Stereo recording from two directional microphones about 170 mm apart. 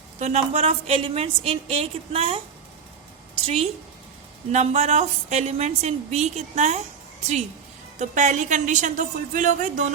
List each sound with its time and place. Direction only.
0.2 s a woman's voice: 40° right (ahead or behind)
3.4 s a woman's voice: 35° right (ahead or behind)
7.9 s a woman's voice: 45° right (ahead or behind)